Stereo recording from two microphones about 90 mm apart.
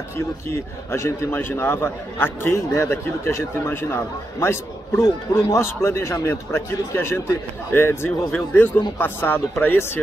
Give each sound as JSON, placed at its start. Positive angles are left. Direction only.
{"t": 0.5, "sound": "a man's voice", "side_deg": 30}